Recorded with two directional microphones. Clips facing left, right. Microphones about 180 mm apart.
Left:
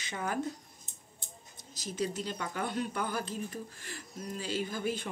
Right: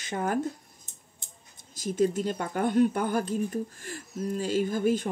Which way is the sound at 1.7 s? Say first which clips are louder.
Right 9 dB; 50° right (ahead or behind).